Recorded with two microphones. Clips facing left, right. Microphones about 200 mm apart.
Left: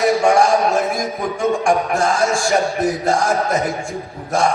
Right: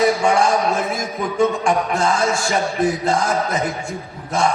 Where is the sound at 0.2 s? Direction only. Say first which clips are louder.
Left 3 dB; 45° left (ahead or behind).